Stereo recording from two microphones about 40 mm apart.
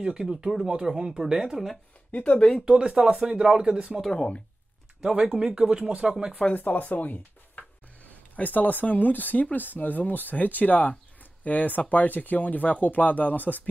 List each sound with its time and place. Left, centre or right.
0.0 s speech: right
2.0 s speech: left
2.6 s speech: right
3.3 s speech: centre
5.1 s speech: right
6.5 s speech: left